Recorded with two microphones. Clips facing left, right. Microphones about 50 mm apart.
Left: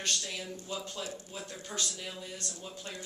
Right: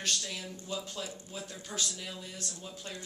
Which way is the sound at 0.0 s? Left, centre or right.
Centre.